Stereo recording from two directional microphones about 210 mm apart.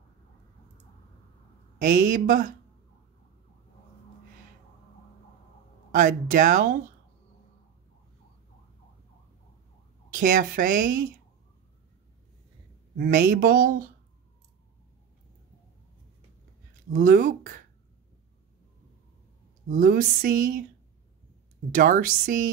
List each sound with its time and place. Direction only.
1.8 s speech: 40° right (ahead or behind)
5.9 s speech: 40° right (ahead or behind)
10.1 s speech: 40° right (ahead or behind)
12.9 s speech: 40° right (ahead or behind)
16.9 s speech: 40° right (ahead or behind)
19.7 s speech: 40° right (ahead or behind)
21.7 s speech: 40° right (ahead or behind)